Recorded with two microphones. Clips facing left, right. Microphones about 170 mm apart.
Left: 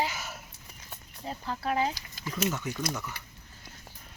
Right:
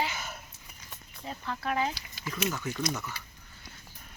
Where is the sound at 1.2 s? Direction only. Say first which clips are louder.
Left 1 dB; 30° left (ahead or behind).